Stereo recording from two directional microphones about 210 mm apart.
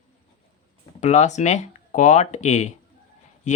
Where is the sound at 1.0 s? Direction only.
35° left (ahead or behind).